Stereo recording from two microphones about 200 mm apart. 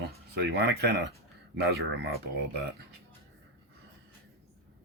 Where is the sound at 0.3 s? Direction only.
55° right (ahead or behind).